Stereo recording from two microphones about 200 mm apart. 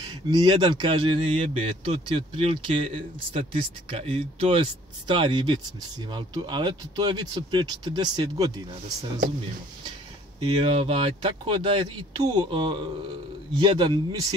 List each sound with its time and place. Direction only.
0.0 s speech: 20° right (ahead or behind)
10.6 s speech: 30° right (ahead or behind)